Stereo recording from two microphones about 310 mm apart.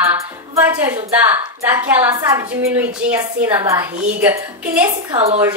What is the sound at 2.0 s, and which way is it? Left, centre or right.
A woman's voice, centre.